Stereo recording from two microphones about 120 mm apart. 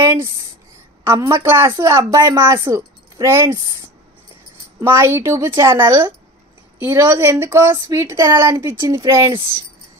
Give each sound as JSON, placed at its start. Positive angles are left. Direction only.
{"t": 0.0, "sound": "a woman's voice", "side_deg": -25}
{"t": 4.8, "sound": "a woman's voice", "side_deg": -20}